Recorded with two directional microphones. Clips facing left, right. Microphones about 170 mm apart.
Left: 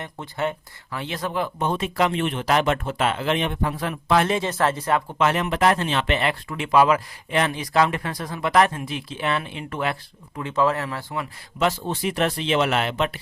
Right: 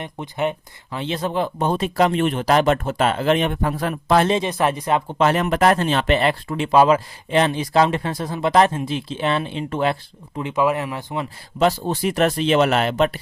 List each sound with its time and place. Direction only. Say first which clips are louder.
0.0 s speech: right 3 dB; 20° right (ahead or behind); by 4.3 s 40° right (ahead or behind)
4.3 s speech: right 3 dB; 20° right (ahead or behind)
5.1 s speech: right 4 dB; 35° right (ahead or behind)
10.5 s speech: right 2 dB; 15° right (ahead or behind)
11.6 s speech: right 4 dB; 35° right (ahead or behind)